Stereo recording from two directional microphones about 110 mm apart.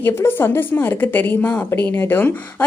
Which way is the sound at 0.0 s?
20° left (ahead or behind).